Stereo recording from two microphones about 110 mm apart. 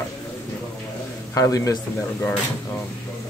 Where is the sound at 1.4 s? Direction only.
30° left (ahead or behind).